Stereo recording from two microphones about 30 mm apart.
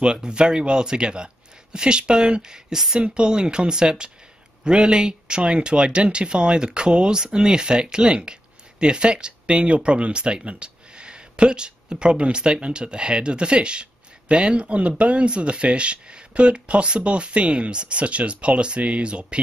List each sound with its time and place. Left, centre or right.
0.0 s speech: right
15.2 s speech: right